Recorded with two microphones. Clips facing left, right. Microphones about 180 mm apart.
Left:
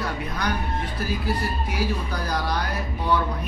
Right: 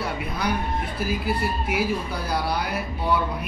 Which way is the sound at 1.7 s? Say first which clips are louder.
Right 2 dB; 10° right (ahead or behind).